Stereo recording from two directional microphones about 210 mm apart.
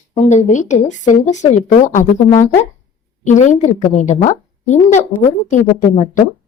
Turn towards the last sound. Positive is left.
turn(degrees=35)  # may be behind; listen again after turning